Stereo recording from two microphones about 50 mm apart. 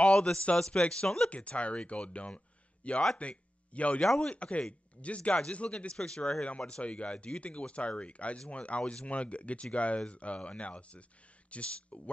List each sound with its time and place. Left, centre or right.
0.0 s speech: centre
4.0 s speech: centre
4.3 s speech: left